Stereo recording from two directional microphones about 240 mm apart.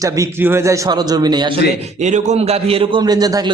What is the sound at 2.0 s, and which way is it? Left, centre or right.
A man's voice, right.